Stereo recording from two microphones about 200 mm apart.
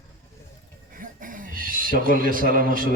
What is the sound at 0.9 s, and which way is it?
A man's voice, 40° right (ahead or behind).